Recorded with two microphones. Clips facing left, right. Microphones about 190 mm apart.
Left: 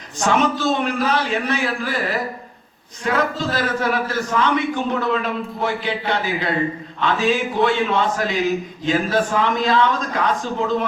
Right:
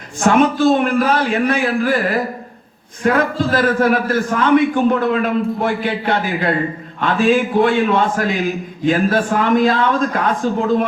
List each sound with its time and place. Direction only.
0.3 s a man's voice: 50° right (ahead or behind)